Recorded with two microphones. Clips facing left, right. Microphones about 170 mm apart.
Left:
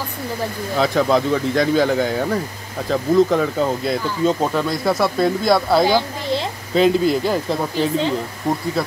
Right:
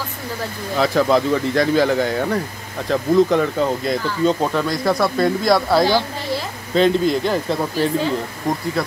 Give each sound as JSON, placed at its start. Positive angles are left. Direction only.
{"t": 0.7, "sound": "speech", "side_deg": 0}